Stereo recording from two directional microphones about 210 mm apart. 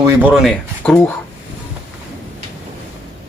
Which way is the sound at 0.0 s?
5° right (ahead or behind).